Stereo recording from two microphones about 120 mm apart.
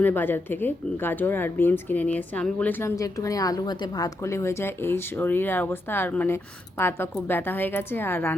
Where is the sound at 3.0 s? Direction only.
30° left (ahead or behind).